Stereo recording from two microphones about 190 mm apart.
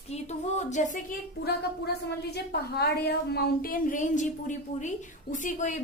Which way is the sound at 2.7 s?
60° left (ahead or behind).